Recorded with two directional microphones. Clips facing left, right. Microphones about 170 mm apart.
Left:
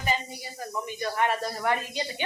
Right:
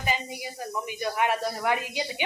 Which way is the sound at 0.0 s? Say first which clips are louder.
Even; 15° right (ahead or behind).